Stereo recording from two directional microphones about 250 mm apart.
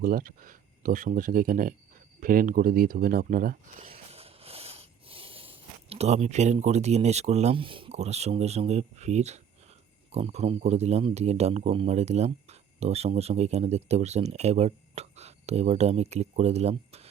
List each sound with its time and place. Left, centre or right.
0.0 s speech: right
3.9 s a sound: right
10.1 s speech: right